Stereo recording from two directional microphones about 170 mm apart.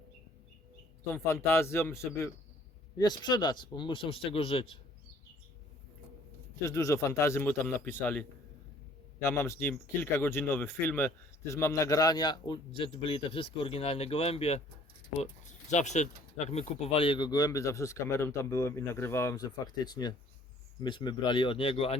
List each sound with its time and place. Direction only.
1.1 s a man's voice: 15° left (ahead or behind); by 4.8 s 35° left (ahead or behind)
6.7 s a man's voice: 15° left (ahead or behind)
9.2 s speech: 15° left (ahead or behind); by 21.9 s 35° left (ahead or behind)